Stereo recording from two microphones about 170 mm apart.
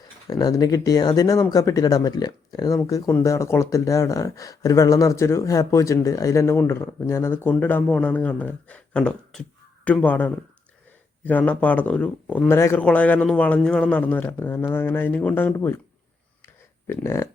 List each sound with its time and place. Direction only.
0.3 s speech: 20° left (ahead or behind)
16.8 s speech: 15° left (ahead or behind)